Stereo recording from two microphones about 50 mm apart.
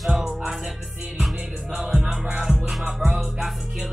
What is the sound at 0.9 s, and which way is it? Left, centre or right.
Music, centre.